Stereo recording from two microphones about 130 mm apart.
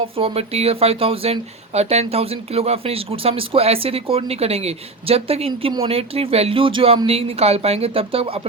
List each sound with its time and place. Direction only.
0.2 s speech: 45° right (ahead or behind)